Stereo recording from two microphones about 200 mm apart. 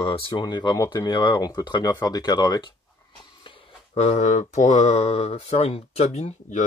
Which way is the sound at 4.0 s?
35° left (ahead or behind).